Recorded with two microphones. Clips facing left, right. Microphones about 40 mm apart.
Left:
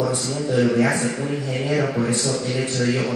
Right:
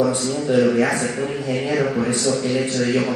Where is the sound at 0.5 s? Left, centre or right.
Right.